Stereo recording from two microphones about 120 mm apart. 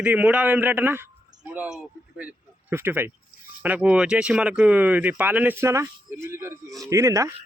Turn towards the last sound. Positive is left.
turn(degrees=-25)  # may be behind; listen again after turning